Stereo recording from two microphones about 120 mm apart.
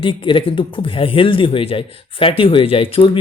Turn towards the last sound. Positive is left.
turn(degrees=50)  # may be behind; listen again after turning